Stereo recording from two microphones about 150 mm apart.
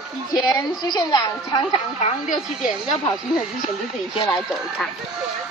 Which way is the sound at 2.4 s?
5° right (ahead or behind).